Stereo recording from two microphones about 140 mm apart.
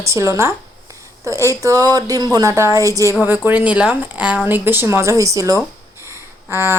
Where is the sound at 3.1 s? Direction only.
15° right (ahead or behind).